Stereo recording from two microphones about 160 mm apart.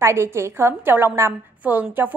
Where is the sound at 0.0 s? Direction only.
15° right (ahead or behind).